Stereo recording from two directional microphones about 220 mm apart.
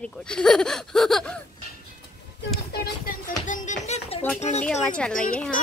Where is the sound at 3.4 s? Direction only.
35° left (ahead or behind).